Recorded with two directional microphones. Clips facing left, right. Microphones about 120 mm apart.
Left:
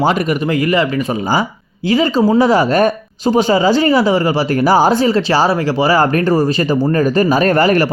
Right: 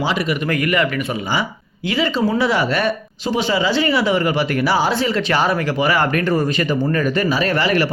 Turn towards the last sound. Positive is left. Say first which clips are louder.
# left 6 dB
turn(degrees=45)  # may be behind; listen again after turning